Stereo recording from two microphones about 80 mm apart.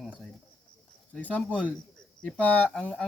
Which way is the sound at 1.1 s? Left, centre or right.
Centre.